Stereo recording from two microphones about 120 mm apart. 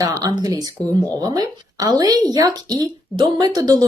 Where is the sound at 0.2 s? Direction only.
30° right (ahead or behind).